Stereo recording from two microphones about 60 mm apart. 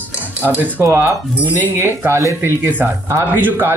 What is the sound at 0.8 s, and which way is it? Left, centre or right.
Speech, right.